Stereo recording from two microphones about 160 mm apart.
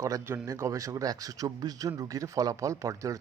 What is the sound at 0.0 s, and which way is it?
Speech, 20° right (ahead or behind).